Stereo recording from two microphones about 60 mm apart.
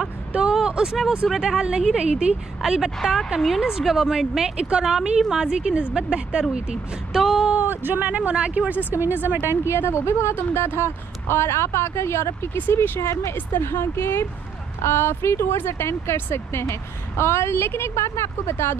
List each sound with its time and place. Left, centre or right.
0.3 s vehicle: centre
1.3 s a woman's voice: centre
3.0 s a woman's voice: centre
7.6 s speech: right
8.9 s speech: right
9.7 s a woman's voice: left
12.5 s speech: left
13.0 s a woman's voice: left